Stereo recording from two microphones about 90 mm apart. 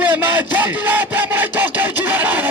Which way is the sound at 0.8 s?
20° right (ahead or behind).